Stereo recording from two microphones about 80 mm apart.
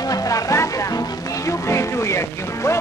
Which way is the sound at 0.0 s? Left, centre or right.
Left.